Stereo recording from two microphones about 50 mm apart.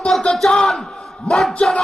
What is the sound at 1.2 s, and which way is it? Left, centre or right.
Speech, centre.